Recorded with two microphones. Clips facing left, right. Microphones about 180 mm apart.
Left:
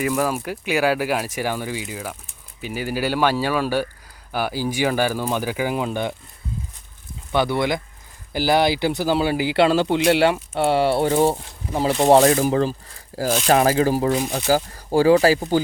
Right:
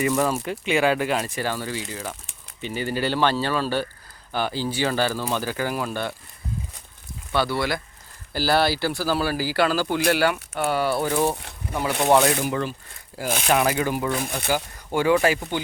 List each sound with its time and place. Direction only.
0.0 s speech: 5° left (ahead or behind)
7.3 s speech: 20° left (ahead or behind); by 14.1 s 35° left (ahead or behind)
14.1 s speech: 55° right (ahead or behind)
14.3 s speech: 35° left (ahead or behind)